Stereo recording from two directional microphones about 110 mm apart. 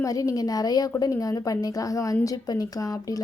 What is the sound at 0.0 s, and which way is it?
A woman's voice, 30° left (ahead or behind).